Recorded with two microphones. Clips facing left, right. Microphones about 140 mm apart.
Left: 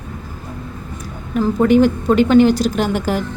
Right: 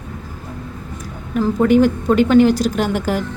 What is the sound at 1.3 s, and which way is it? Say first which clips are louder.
Speech: left 1 dB; 25° left (ahead or behind).